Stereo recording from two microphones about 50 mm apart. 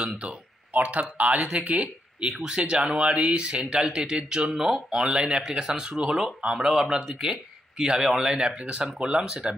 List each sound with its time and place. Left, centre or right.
0.7 s speech: right
2.3 s speech: centre